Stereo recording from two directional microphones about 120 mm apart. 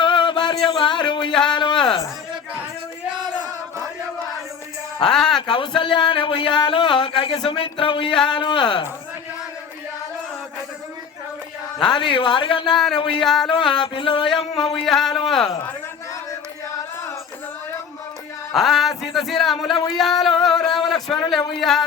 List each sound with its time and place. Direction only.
0.0 s a sound: 40° left (ahead or behind)
1.3 s a sound: 5° left (ahead or behind)
1.8 s speech: 45° left (ahead or behind)
5.0 s a sound: 5° left (ahead or behind)
5.5 s speech: 45° left (ahead or behind)
11.9 s speech: 45° left (ahead or behind)
12.7 s speech: 5° left (ahead or behind)
13.0 s speech: 45° left (ahead or behind)
13.2 s speech: 5° left (ahead or behind)
13.7 s speech: 40° left (ahead or behind)
14.7 s speech: 5° left (ahead or behind)
18.5 s speech: centre (ahead or behind)
19.9 s a sound: centre (ahead or behind)
21.2 s speech: centre (ahead or behind)